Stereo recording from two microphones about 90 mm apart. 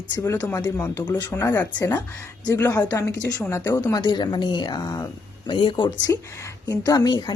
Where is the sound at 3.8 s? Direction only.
50° left (ahead or behind).